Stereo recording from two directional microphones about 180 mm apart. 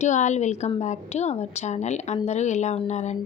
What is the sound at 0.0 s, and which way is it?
Speech, 40° left (ahead or behind).